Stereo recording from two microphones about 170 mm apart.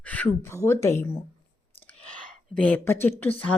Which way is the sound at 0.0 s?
10° left (ahead or behind).